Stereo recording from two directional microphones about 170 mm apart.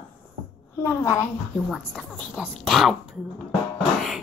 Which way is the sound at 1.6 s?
Centre (ahead or behind).